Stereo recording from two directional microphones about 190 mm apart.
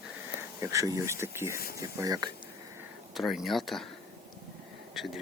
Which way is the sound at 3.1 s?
Centre (ahead or behind).